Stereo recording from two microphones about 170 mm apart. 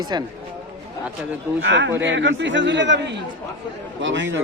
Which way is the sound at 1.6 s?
90° right.